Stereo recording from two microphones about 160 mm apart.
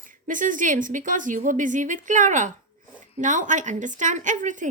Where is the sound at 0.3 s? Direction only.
55° right (ahead or behind).